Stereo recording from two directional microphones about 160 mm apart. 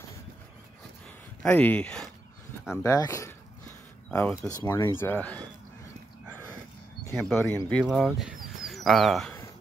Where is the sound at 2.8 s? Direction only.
20° left (ahead or behind).